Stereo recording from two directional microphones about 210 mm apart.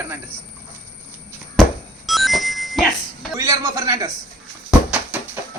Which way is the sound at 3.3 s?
15° right (ahead or behind).